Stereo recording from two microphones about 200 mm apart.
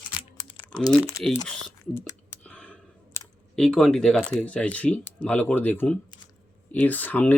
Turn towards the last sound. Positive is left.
turn(degrees=10)  # may be behind; listen again after turning